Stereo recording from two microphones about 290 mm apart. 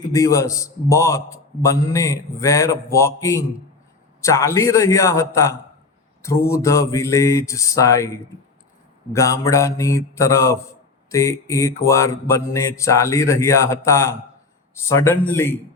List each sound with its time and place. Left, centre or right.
0.1 s a man's voice: centre
9.1 s a man's voice: centre